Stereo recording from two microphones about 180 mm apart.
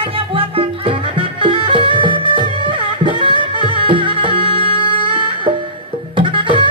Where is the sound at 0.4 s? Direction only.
30° right (ahead or behind).